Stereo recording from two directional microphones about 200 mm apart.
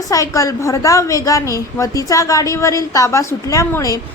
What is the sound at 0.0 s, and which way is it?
A woman's voice, 15° left (ahead or behind).